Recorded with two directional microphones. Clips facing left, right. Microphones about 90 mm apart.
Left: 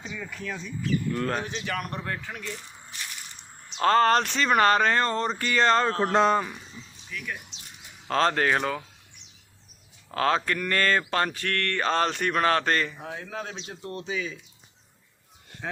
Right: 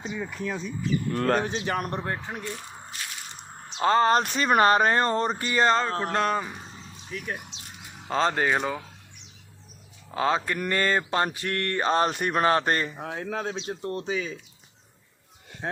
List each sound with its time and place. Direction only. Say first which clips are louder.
0.1 s speech: right 4 dB; 20° right (ahead or behind)
1.1 s speech: right 4 dB; 50° right (ahead or behind)
1.5 s speech: right 4 dB; 35° right (ahead or behind)
3.8 s speech: even; 10° right (ahead or behind)
5.5 s speech: left 1 dB; 10° right (ahead or behind)
7.1 s speech: right 2 dB; 40° right (ahead or behind)
8.0 s speech: left 1 dB; 10° right (ahead or behind)
10.1 s speech: left 1 dB; 10° right (ahead or behind)
13.0 s speech: right 4 dB; 45° right (ahead or behind)